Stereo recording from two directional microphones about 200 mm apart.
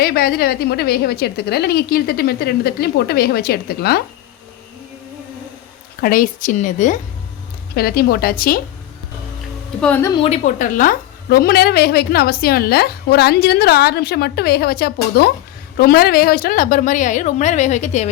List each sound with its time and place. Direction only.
0.0 s a woman's voice: 50° left (ahead or behind)
6.0 s a woman's voice: 45° left (ahead or behind)
7.8 s a woman's voice: 50° left (ahead or behind)
9.8 s a woman's voice: 10° left (ahead or behind)
10.2 s a woman's voice: 35° left (ahead or behind)